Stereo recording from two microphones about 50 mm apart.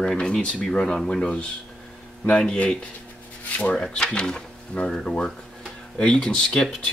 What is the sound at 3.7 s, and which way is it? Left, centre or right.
Speech, centre.